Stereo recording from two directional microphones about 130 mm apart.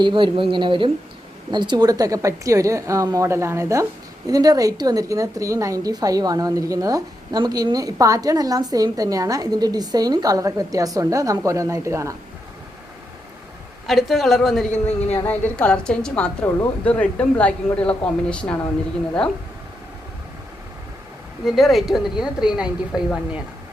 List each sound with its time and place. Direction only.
0.0 s a woman's voice: 40° right (ahead or behind); by 12.1 s 20° right (ahead or behind)
13.8 s a woman's voice: centre (ahead or behind)
21.4 s a woman's voice: centre (ahead or behind)